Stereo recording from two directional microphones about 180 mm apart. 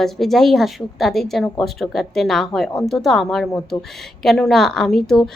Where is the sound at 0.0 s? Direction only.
Centre (ahead or behind).